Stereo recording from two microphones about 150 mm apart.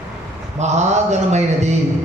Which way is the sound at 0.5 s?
50° right (ahead or behind).